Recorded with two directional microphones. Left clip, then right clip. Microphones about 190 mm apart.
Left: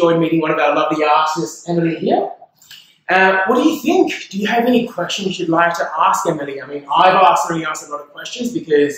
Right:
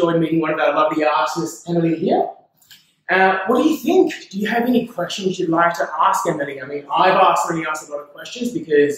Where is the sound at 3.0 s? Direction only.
10° left (ahead or behind).